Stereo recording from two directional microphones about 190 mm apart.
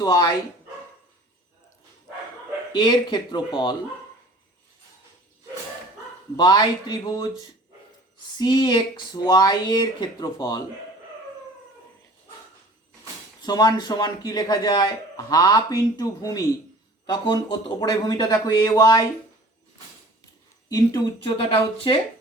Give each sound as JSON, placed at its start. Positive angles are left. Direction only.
{"t": 0.0, "sound": "a man's voice", "side_deg": 20}
{"t": 2.7, "sound": "a man's voice", "side_deg": 25}
{"t": 6.3, "sound": "a man's voice", "side_deg": 20}
{"t": 13.4, "sound": "a man's voice", "side_deg": 20}
{"t": 20.7, "sound": "a man's voice", "side_deg": 20}